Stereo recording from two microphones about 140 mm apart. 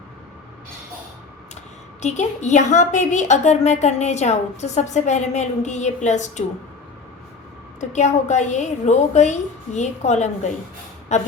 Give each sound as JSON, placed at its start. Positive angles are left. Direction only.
{"t": 2.0, "sound": "a woman's voice", "side_deg": 55}
{"t": 7.8, "sound": "a woman's voice", "side_deg": 55}